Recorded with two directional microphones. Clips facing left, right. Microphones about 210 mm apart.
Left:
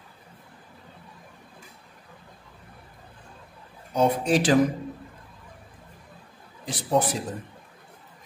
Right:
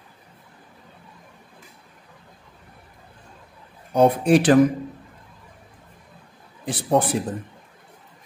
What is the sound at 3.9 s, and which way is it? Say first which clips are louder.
Speech: right 6 dB; 55° right (ahead or behind).